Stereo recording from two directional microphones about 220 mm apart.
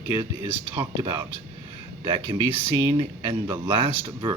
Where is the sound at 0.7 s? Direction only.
15° right (ahead or behind).